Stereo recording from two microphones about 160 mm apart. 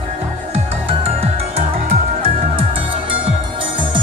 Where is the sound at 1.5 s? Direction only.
40° right (ahead or behind).